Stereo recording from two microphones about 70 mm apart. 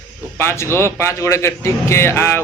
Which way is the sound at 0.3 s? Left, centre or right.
Left.